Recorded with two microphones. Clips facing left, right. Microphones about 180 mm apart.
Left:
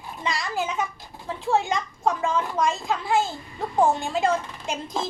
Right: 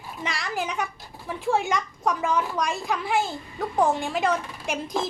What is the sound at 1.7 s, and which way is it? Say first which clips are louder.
A child's voice: left 1 dB; 20° left (ahead or behind).